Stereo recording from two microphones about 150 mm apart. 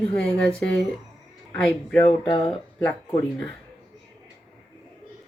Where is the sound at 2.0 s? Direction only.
35° left (ahead or behind).